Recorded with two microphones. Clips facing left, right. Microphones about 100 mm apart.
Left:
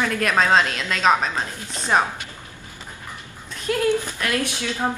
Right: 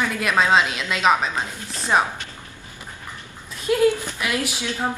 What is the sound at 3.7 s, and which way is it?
Speech, 10° right (ahead or behind).